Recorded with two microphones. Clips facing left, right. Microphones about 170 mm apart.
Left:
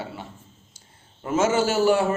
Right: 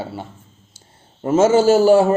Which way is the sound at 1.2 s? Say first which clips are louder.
Right 8 dB; 30° right (ahead or behind).